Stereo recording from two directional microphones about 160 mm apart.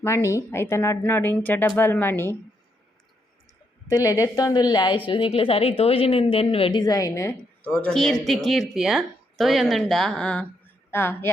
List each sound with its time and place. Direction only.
0.0 s speech: 15° left (ahead or behind)
3.8 s a woman's voice: 20° left (ahead or behind)
7.3 s speech: 5° left (ahead or behind)